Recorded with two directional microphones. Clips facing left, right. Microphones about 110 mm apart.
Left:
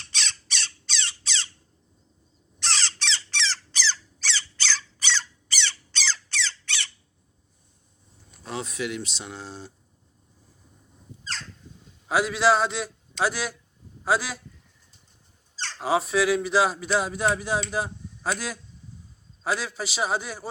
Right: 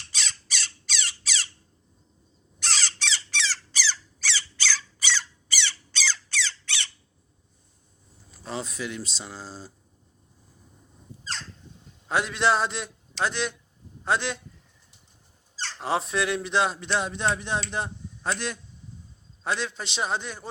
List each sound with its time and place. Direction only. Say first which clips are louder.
0.1 s squawk: left 1 dB; 5° right (ahead or behind)
2.6 s squawk: left 1 dB; 10° right (ahead or behind)
8.3 s speech: even; centre (ahead or behind)
12.0 s a man's voice: left 3 dB; 5° left (ahead or behind)
15.5 s squeak: even; 15° right (ahead or behind)
15.8 s speech: left 3 dB; centre (ahead or behind)